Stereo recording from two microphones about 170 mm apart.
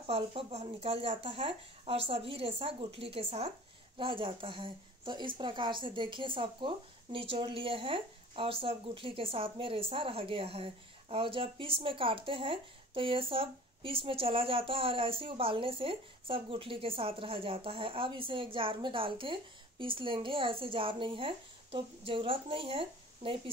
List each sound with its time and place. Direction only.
0.0 s a woman's voice: 35° right (ahead or behind)